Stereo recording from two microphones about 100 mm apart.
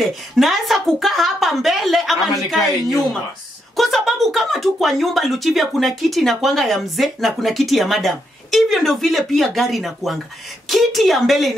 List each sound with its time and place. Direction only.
0.0 s speech: centre (ahead or behind)